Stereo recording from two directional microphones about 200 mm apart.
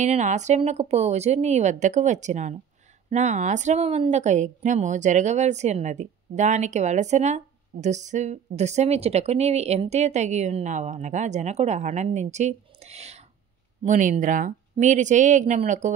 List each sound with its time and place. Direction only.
0.0 s a woman's voice: 35° right (ahead or behind)